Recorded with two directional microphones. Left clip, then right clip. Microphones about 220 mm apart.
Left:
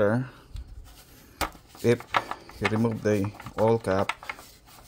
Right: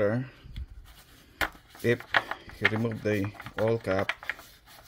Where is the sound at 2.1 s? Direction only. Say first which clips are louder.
Even; 15° left (ahead or behind).